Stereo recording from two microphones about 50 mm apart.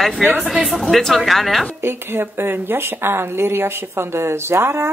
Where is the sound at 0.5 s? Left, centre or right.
Centre.